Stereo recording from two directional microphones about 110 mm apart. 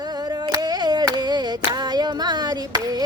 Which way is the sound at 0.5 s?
40° right (ahead or behind).